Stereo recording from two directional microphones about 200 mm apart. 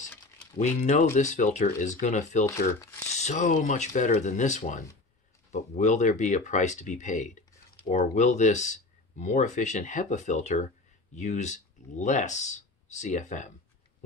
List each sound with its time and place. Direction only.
0.6 s speech: 35° left (ahead or behind)